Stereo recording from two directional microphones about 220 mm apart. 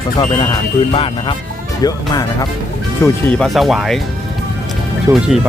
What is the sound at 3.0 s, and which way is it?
Speech, 5° left (ahead or behind).